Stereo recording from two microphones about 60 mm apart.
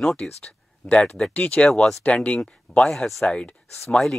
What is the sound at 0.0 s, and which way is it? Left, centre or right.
Speech, centre.